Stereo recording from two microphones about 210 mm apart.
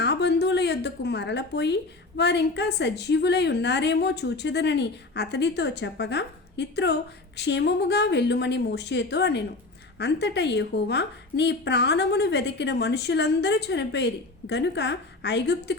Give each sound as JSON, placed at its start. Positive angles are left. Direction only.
{"t": 0.0, "sound": "a woman's voice", "side_deg": 55}